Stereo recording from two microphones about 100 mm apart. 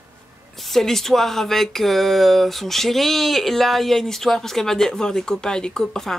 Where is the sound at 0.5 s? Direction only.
Centre (ahead or behind).